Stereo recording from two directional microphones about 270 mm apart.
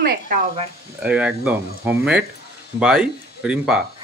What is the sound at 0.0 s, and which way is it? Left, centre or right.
Speech, right.